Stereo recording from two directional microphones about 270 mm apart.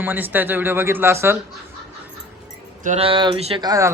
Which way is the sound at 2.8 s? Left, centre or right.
Right.